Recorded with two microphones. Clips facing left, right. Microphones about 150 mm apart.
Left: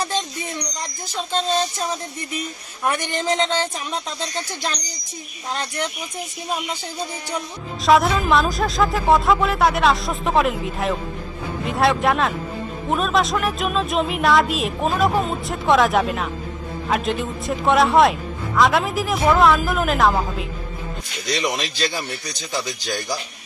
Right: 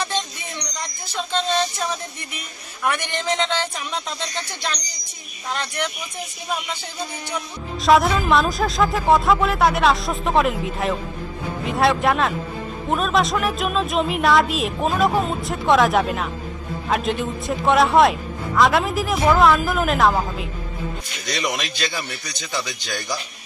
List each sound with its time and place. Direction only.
2.9 s a man's voice: 40° left (ahead or behind)
5.5 s a man's voice: 35° left (ahead or behind)
7.8 s speech: centre (ahead or behind)
21.4 s a man's voice: 30° left (ahead or behind)